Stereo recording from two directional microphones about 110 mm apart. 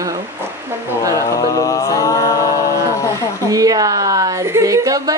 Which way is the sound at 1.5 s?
30° left (ahead or behind).